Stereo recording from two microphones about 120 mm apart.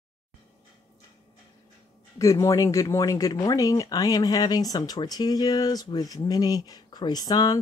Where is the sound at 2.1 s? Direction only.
30° left (ahead or behind).